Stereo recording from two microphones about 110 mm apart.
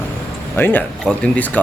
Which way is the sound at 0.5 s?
20° left (ahead or behind).